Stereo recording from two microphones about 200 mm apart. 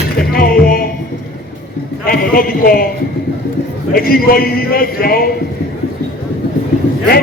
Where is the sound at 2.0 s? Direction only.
50° left (ahead or behind).